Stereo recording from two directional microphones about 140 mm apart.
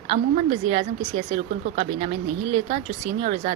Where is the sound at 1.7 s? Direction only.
70° right (ahead or behind).